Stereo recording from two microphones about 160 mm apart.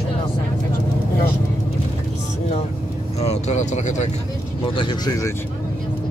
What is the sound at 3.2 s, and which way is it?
Speech, 45° left (ahead or behind).